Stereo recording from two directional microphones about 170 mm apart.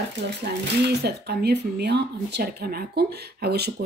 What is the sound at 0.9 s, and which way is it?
Speech, 70° right (ahead or behind).